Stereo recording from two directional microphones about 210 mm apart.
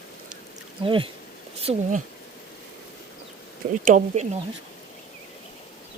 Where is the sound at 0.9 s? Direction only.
25° right (ahead or behind).